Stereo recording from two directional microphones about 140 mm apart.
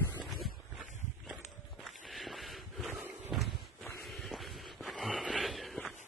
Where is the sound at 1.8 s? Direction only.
Centre (ahead or behind).